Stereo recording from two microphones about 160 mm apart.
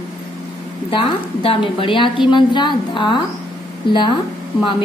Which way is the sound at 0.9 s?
35° left (ahead or behind).